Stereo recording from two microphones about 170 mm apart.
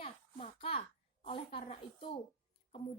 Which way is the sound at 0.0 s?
40° left (ahead or behind).